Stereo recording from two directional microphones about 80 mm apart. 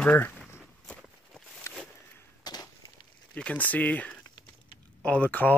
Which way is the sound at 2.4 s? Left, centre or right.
Left.